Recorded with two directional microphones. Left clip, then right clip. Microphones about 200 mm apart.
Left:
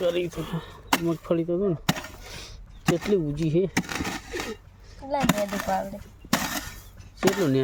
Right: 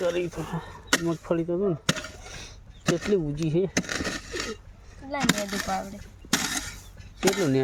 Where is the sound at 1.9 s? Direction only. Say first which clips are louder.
Even; 60° left (ahead or behind).